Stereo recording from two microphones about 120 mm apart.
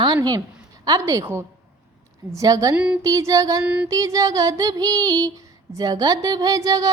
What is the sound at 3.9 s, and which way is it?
A woman's voice, 30° right (ahead or behind).